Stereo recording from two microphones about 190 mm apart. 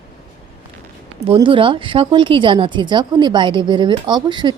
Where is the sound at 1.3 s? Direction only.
25° right (ahead or behind).